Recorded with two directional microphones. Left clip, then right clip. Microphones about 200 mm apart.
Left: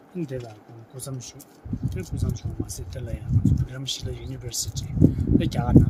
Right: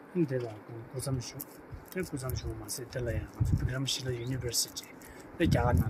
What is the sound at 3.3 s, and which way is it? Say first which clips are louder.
Speech: left 9 dB; 40° left (ahead or behind).